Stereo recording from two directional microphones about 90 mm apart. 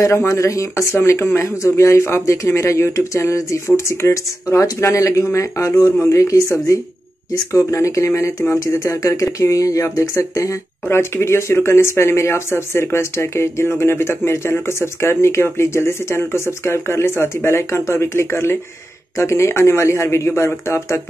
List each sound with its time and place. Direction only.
0.0 s speech: 35° left (ahead or behind)